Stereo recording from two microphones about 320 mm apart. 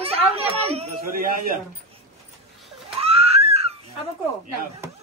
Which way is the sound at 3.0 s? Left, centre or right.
Centre.